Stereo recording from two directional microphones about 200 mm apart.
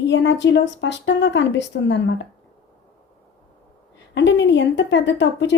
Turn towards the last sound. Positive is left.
turn(degrees=65)  # may be behind; listen again after turning